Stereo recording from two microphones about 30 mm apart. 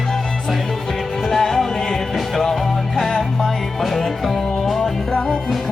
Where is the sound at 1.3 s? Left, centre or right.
Centre.